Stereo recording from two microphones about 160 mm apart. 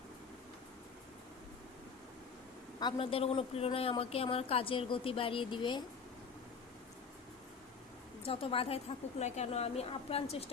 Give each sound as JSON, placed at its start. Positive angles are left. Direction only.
{"t": 2.8, "sound": "a woman's voice", "side_deg": 35}
{"t": 8.2, "sound": "a woman's voice", "side_deg": 35}